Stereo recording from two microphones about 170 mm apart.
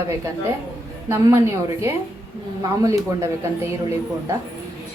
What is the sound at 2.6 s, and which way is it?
Speech, 20° right (ahead or behind).